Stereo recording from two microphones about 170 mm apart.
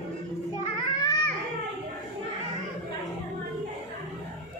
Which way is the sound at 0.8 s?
20° left (ahead or behind).